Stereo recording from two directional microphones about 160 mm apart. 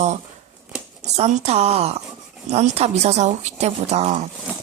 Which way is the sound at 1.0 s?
45° right (ahead or behind).